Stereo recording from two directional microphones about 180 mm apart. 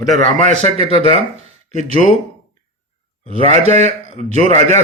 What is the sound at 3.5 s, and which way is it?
Speech, 40° right (ahead or behind).